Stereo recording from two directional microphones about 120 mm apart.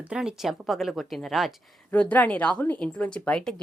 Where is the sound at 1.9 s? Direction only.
10° left (ahead or behind).